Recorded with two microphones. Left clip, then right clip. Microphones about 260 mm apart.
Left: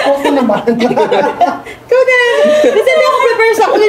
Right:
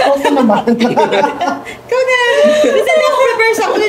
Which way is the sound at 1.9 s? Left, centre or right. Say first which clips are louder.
Left 3 dB; centre.